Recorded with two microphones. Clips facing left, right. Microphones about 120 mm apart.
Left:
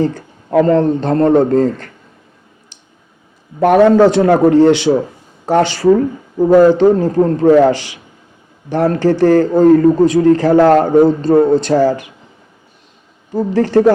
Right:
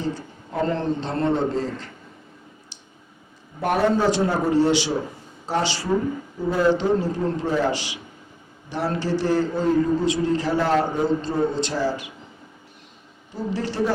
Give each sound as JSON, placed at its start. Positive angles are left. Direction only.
{"t": 0.8, "sound": "a man's voice", "side_deg": 50}
{"t": 3.6, "sound": "a man's voice", "side_deg": 80}
{"t": 13.3, "sound": "a man's voice", "side_deg": 50}